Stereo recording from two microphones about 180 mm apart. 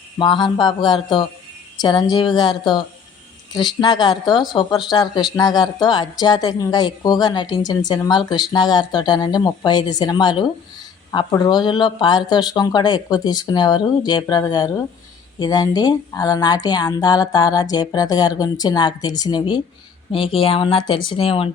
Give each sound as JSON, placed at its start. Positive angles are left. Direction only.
{"t": 0.2, "sound": "a woman's voice", "side_deg": 25}